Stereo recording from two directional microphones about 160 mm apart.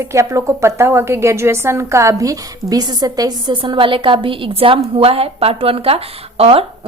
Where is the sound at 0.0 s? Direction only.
20° right (ahead or behind).